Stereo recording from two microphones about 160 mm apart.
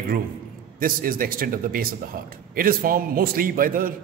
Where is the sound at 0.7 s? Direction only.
60° right (ahead or behind).